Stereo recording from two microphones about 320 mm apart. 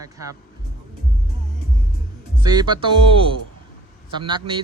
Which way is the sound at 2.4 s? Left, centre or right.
Centre.